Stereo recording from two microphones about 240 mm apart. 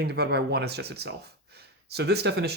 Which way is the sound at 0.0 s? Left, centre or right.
Right.